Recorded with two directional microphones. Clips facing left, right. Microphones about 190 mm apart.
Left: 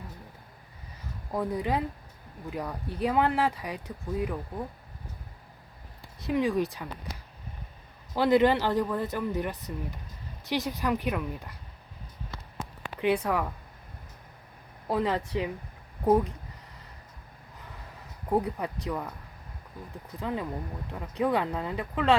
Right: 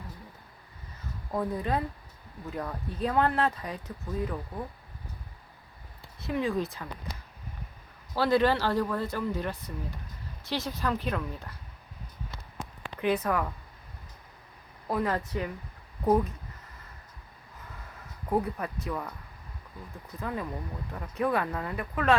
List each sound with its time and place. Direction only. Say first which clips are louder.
1.3 s speech: left 1 dB; 15° left (ahead or behind)
6.1 s speech: left 3 dB; 15° left (ahead or behind)
8.1 s speech: left 2 dB; 20° left (ahead or behind)
13.0 s speech: left 1 dB; 15° left (ahead or behind)
14.8 s speech: left 1 dB; 20° left (ahead or behind)
18.3 s speech: left 1 dB; 15° left (ahead or behind)
20.1 s speech: left 2 dB; 15° left (ahead or behind)